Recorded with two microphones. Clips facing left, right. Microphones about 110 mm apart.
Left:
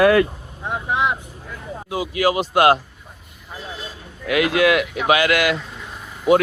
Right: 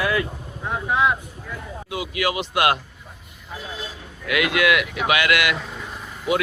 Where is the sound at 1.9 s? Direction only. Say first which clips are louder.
Left 5 dB; 35° left (ahead or behind).